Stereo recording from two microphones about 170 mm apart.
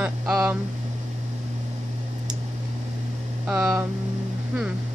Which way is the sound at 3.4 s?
5° right (ahead or behind).